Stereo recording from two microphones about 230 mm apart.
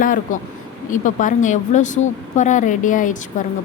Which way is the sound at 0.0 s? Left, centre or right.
Left.